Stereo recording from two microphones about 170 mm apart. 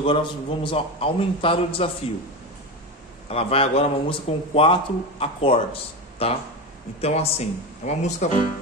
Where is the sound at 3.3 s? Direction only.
35° left (ahead or behind).